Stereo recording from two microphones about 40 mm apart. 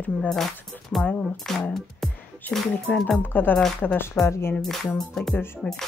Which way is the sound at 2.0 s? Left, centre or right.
Centre.